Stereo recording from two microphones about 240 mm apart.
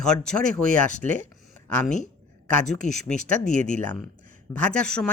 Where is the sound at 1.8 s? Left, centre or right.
Left.